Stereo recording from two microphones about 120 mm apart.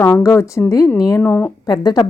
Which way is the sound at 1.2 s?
15° left (ahead or behind).